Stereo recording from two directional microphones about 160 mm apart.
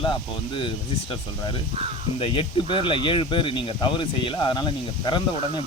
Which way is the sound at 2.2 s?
35° left (ahead or behind).